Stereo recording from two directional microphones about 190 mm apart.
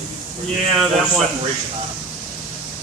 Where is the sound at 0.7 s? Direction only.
Centre (ahead or behind).